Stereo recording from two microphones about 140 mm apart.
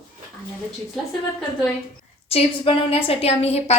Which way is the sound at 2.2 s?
45° left (ahead or behind).